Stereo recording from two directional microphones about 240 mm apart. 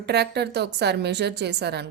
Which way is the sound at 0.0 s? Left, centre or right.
Right.